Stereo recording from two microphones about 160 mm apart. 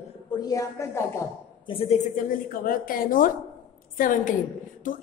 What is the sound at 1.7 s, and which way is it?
A woman's voice, 40° left (ahead or behind).